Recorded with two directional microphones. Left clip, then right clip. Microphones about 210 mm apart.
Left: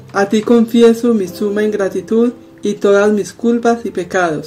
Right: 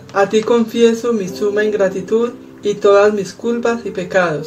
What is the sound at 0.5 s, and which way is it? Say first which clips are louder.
Speech: left 3 dB; 45° left (ahead or behind).